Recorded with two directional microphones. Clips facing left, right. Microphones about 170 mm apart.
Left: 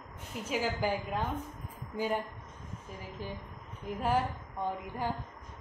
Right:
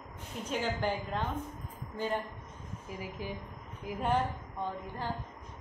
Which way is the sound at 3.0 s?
10° right (ahead or behind).